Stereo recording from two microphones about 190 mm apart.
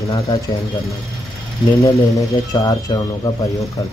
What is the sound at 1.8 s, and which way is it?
Speech, 15° left (ahead or behind).